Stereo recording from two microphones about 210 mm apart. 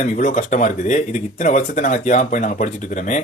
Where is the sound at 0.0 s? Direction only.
35° left (ahead or behind).